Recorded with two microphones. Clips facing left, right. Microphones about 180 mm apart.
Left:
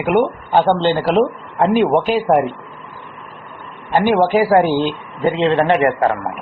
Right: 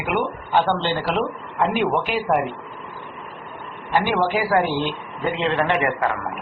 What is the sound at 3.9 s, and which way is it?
Speech, 30° left (ahead or behind).